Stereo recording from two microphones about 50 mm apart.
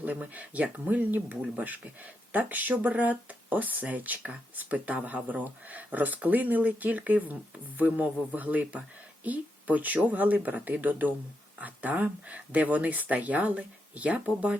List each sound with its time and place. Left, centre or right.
0.0 s speech: right